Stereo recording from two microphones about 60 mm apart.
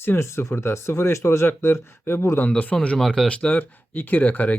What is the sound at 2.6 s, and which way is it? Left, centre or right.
Speech, left.